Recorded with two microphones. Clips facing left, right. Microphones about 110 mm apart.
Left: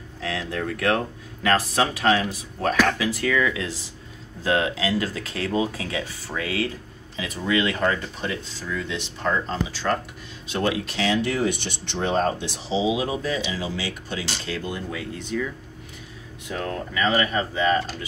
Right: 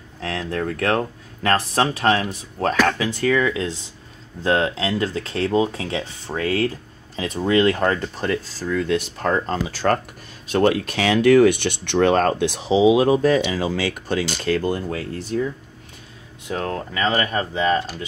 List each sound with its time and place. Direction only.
0.2 s speech: 30° right (ahead or behind)